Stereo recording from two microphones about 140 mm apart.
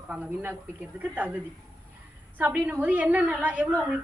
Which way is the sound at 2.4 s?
10° right (ahead or behind).